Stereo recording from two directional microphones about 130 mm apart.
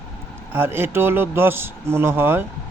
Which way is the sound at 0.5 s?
15° right (ahead or behind).